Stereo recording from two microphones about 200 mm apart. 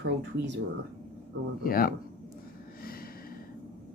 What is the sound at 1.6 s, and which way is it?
Speech, 45° left (ahead or behind).